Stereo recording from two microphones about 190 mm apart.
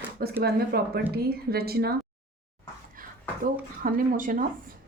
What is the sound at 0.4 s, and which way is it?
A woman's voice, 55° right (ahead or behind).